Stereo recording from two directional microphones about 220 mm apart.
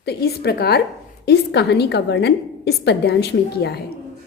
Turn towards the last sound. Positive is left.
turn(degrees=45)  # may be behind; listen again after turning